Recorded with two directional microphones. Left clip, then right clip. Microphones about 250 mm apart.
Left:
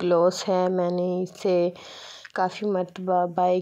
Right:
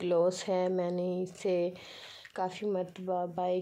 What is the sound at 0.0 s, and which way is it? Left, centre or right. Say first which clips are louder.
Speech: left 8 dB; centre.